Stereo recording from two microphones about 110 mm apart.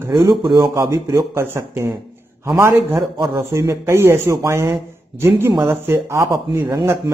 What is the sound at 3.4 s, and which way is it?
Speech, 25° right (ahead or behind).